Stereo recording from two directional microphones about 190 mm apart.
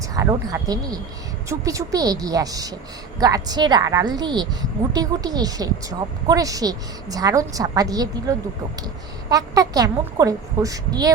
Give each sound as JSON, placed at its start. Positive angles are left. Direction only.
{"t": 0.1, "sound": "a woman's voice", "side_deg": -20}